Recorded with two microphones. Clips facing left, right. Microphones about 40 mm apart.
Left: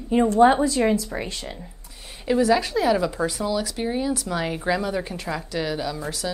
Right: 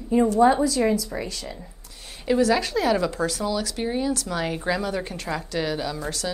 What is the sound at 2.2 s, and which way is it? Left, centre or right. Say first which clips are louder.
Speech: left 1 dB; centre.